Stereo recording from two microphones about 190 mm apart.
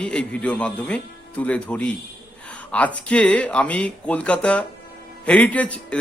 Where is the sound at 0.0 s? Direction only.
5° left (ahead or behind).